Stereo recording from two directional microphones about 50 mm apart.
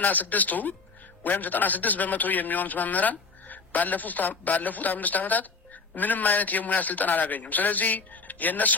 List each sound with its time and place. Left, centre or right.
0.0 s a man's voice: left